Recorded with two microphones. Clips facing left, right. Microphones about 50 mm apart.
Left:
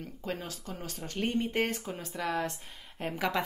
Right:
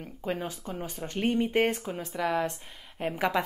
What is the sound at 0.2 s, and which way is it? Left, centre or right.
Speech, centre.